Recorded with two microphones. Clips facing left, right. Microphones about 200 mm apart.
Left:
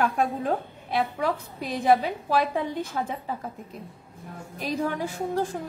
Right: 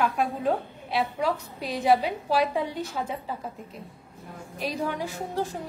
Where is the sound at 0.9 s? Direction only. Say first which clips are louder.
Even; 50° left (ahead or behind).